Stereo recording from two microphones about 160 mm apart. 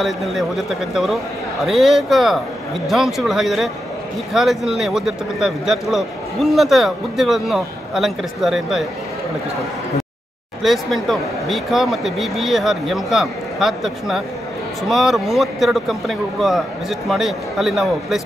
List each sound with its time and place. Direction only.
0.0 s speech: centre (ahead or behind)
10.6 s speech: centre (ahead or behind)